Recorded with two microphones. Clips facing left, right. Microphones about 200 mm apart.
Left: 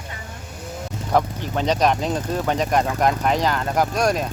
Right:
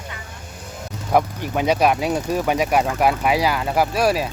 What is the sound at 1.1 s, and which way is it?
Speech, 10° right (ahead or behind).